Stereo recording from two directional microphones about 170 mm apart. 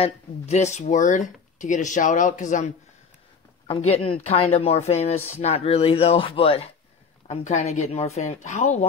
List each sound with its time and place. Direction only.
0.0 s speech: 40° left (ahead or behind)
3.6 s speech: 35° left (ahead or behind)